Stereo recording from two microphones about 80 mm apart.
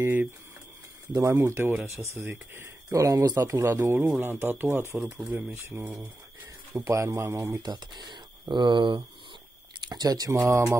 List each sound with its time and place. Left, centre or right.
0.0 s speech: right
1.1 s speech: right
2.9 s speech: right
3.3 s speech: right
6.7 s speech: right
7.6 s speech: right
9.8 s speech: right
10.3 s speech: right